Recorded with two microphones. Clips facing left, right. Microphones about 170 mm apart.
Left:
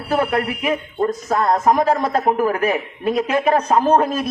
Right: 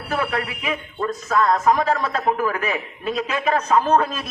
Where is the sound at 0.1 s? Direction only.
40° left (ahead or behind).